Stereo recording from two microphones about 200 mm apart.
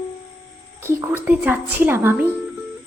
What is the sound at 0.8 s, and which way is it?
A woman's voice, 15° right (ahead or behind).